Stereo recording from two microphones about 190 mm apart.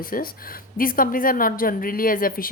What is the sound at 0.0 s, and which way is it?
A woman's voice, 50° left (ahead or behind).